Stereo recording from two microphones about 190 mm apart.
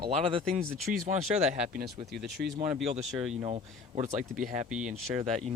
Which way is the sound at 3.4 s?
35° right (ahead or behind).